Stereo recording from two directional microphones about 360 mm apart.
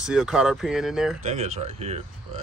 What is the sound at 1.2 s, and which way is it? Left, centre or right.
Speech, centre.